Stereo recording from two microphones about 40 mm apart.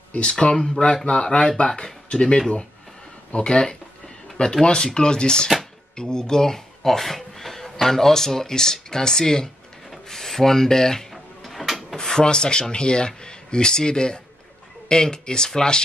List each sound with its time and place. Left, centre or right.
0.3 s speech: left
1.0 s speech: left
10.0 s rub: centre
12.2 s speech: left